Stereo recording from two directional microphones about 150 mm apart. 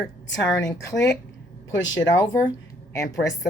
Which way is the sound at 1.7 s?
20° left (ahead or behind).